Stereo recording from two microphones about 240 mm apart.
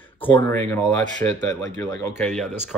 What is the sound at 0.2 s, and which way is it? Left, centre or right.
Speech, centre.